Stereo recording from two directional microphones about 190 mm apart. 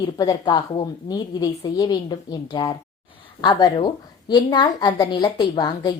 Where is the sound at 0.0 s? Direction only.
20° left (ahead or behind).